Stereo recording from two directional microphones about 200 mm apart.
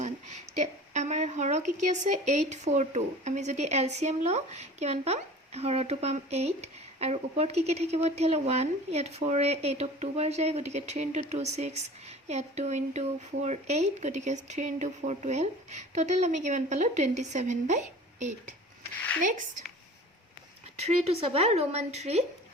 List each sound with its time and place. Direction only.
0.0 s speech: 35° right (ahead or behind)
20.7 s speech: 30° right (ahead or behind)